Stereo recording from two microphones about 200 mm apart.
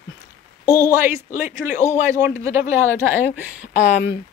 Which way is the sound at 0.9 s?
10° right (ahead or behind).